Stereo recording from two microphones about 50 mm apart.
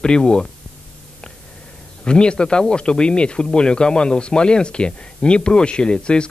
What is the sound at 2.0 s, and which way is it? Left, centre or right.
Speech, centre.